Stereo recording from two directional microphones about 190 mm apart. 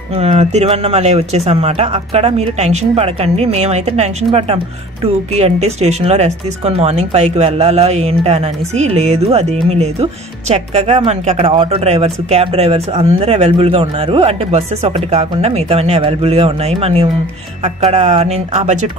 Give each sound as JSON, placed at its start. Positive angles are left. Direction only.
{"t": 0.1, "sound": "speech", "side_deg": -35}